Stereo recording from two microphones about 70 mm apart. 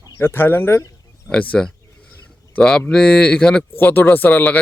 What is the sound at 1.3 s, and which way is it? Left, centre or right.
Speech, left.